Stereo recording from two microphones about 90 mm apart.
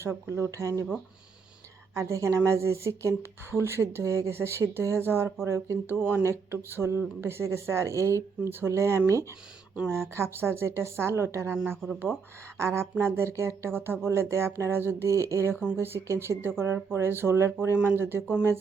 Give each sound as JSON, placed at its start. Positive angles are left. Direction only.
{"t": 0.0, "sound": "speech", "side_deg": -30}
{"t": 2.0, "sound": "a woman's voice", "side_deg": -35}
{"t": 12.5, "sound": "a woman's voice", "side_deg": -30}